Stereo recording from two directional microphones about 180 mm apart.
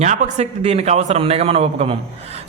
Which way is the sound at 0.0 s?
40° right (ahead or behind).